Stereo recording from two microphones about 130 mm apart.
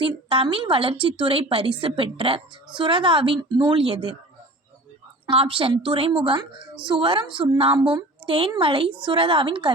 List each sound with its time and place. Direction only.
0.3 s a woman's voice: 45° right (ahead or behind)
5.2 s a woman's voice: 45° right (ahead or behind)